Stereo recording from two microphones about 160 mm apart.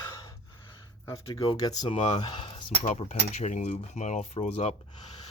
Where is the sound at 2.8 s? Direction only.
45° left (ahead or behind).